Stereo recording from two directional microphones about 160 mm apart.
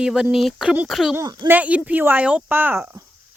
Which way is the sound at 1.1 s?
20° right (ahead or behind).